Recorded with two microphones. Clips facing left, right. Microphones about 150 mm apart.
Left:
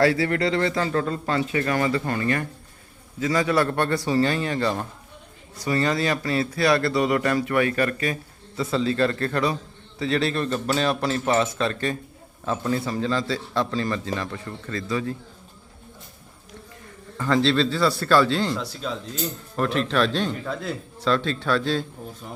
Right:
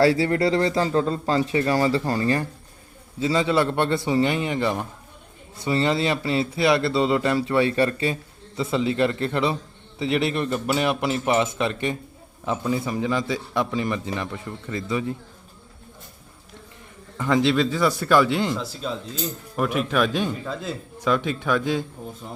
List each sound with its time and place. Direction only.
0.0 s a man's voice: 30° right (ahead or behind)
17.2 s a man's voice: 15° right (ahead or behind)
18.5 s a man's voice: 5° right (ahead or behind)